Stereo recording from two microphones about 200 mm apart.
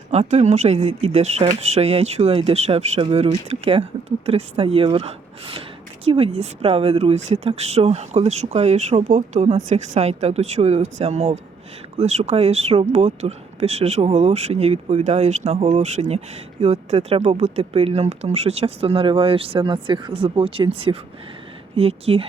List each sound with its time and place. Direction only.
0.1 s speech: 30° right (ahead or behind)